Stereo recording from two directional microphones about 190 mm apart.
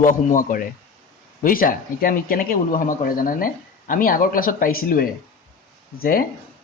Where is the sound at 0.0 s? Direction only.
45° left (ahead or behind).